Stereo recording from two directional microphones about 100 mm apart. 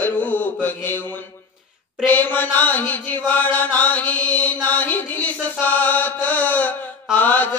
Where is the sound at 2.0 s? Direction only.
15° left (ahead or behind).